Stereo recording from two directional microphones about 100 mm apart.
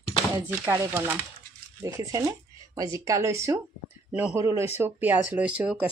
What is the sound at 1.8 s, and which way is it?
Speech, 35° right (ahead or behind).